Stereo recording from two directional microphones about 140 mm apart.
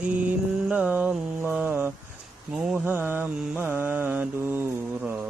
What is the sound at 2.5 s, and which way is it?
Mantra, 10° right (ahead or behind).